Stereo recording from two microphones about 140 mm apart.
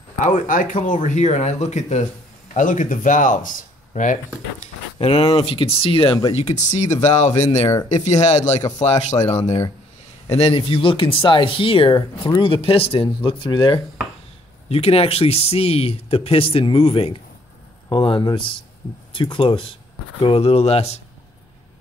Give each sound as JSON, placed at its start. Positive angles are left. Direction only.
{"t": 0.2, "sound": "speech", "side_deg": 70}
{"t": 2.5, "sound": "speech", "side_deg": 70}
{"t": 4.9, "sound": "speech", "side_deg": 45}
{"t": 6.5, "sound": "speech", "side_deg": 55}